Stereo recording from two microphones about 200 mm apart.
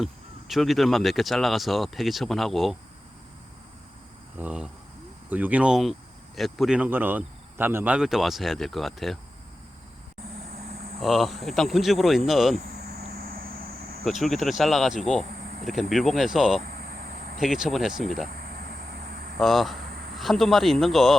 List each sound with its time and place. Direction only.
0.0 s speech: centre (ahead or behind)
4.4 s speech: 5° right (ahead or behind)
11.0 s speech: centre (ahead or behind)
13.1 s vehicle: 50° right (ahead or behind)
14.0 s speech: centre (ahead or behind)
16.6 s a sound: 50° right (ahead or behind)
17.4 s speech: centre (ahead or behind)
19.4 s speech: centre (ahead or behind)